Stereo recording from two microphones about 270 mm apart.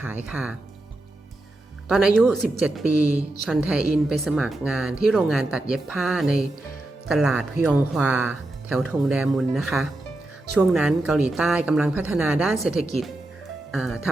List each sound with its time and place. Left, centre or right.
0.3 s a woman's voice: centre
1.9 s a woman's voice: centre